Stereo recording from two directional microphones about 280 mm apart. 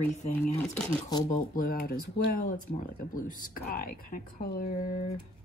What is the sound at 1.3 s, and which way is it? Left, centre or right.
Speech, left.